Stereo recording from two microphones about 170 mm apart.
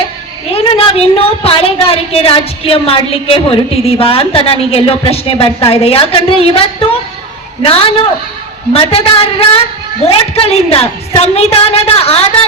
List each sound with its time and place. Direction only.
0.5 s a woman's voice: 35° left (ahead or behind)